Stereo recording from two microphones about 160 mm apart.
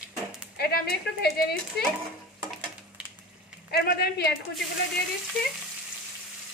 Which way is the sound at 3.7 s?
80° left.